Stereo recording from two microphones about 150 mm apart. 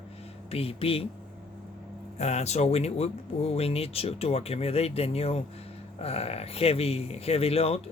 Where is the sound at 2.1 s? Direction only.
45° left (ahead or behind).